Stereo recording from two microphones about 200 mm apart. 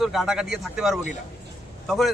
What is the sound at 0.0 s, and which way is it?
A man's voice, centre (ahead or behind).